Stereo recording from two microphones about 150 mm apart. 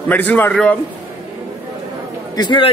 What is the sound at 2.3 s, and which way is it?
Speech, 30° left (ahead or behind).